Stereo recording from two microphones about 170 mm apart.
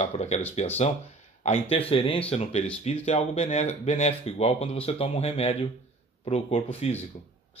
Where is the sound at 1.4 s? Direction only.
35° left (ahead or behind).